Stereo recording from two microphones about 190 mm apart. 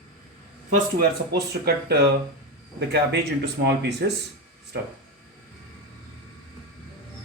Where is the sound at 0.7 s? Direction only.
55° right (ahead or behind).